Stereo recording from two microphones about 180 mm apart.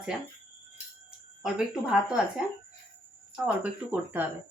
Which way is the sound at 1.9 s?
5° right (ahead or behind).